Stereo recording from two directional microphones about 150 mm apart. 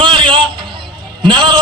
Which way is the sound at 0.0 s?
35° right (ahead or behind).